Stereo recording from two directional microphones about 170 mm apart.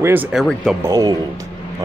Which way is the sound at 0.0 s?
10° right (ahead or behind).